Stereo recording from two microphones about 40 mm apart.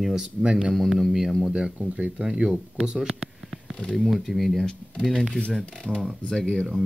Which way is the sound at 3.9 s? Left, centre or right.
Centre.